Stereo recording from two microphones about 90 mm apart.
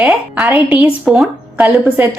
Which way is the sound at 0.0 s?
10° right (ahead or behind).